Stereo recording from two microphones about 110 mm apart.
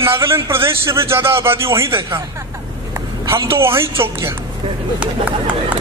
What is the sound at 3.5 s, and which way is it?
Speech, 25° right (ahead or behind).